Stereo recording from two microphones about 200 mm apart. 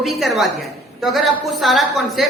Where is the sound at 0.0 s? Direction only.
Centre (ahead or behind).